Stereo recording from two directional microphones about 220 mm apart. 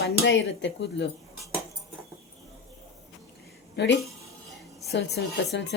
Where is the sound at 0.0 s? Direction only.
55° left (ahead or behind).